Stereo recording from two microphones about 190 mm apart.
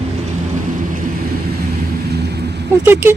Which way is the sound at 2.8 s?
10° right (ahead or behind).